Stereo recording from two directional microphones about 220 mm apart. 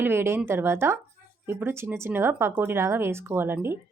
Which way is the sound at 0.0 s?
10° right (ahead or behind).